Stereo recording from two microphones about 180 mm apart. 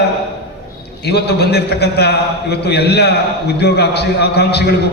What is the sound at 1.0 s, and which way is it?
A man's voice, 65° left (ahead or behind).